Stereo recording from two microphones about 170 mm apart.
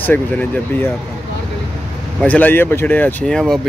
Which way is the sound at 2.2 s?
10° left (ahead or behind).